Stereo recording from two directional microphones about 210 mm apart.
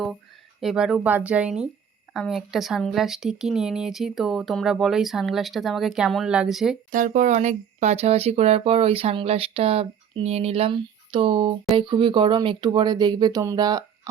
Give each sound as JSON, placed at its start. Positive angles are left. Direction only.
{"t": 0.6, "sound": "speech", "side_deg": 0}
{"t": 6.9, "sound": "speech", "side_deg": -40}